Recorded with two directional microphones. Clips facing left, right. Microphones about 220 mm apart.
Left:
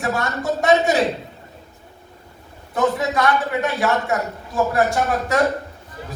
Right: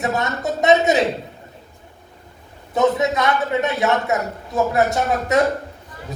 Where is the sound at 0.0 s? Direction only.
20° right (ahead or behind).